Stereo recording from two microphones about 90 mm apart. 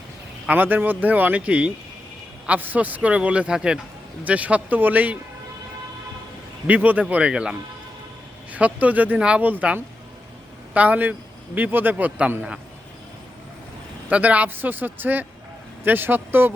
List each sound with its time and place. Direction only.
0.4 s speech: 20° right (ahead or behind)
6.7 s speech: 20° right (ahead or behind)
8.5 s speech: 15° right (ahead or behind)
14.1 s speech: 15° right (ahead or behind)